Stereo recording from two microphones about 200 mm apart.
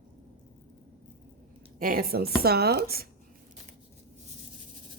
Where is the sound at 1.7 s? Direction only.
45° right (ahead or behind).